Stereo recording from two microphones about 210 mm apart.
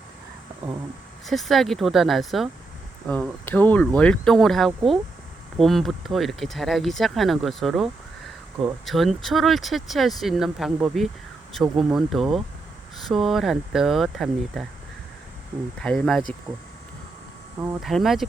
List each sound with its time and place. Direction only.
1.3 s speech: centre (ahead or behind)
15.8 s speech: 5° left (ahead or behind)
17.8 s speech: centre (ahead or behind)